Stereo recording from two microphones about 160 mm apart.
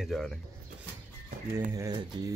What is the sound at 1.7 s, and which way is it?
Speech, 25° right (ahead or behind).